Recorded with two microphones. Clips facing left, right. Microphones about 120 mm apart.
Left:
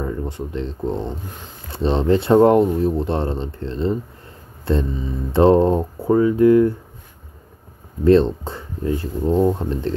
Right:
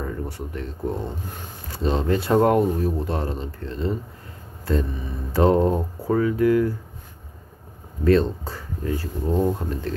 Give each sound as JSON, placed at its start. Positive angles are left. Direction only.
{"t": 0.0, "sound": "speech", "side_deg": 20}
{"t": 8.0, "sound": "speech", "side_deg": 25}